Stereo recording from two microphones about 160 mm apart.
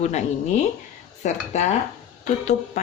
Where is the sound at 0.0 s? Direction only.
45° left (ahead or behind).